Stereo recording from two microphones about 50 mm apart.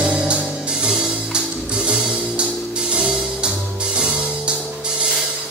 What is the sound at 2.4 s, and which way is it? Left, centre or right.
Music, centre.